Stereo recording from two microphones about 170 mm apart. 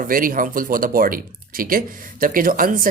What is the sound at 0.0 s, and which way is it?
Speech, 55° right (ahead or behind).